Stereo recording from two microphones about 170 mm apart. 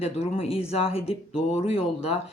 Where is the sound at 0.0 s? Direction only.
35° left (ahead or behind).